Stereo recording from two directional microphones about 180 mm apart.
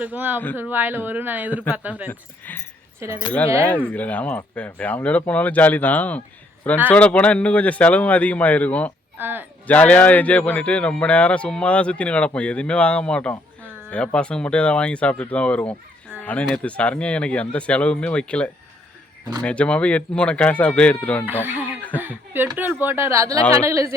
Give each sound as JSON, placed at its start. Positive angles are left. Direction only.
{"t": 0.0, "sound": "speech", "side_deg": -10}
{"t": 2.0, "sound": "speech", "side_deg": 10}
{"t": 3.0, "sound": "speech", "side_deg": -15}
{"t": 3.7, "sound": "speech", "side_deg": 10}
{"t": 9.1, "sound": "speech", "side_deg": -10}
{"t": 9.6, "sound": "speech", "side_deg": 10}
{"t": 21.4, "sound": "speech", "side_deg": -10}
{"t": 21.8, "sound": "a sound", "side_deg": 10}
{"t": 22.0, "sound": "a sound", "side_deg": -10}
{"t": 22.5, "sound": "speech", "side_deg": -10}